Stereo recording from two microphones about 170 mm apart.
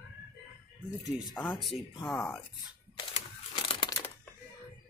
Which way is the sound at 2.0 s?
15° left (ahead or behind).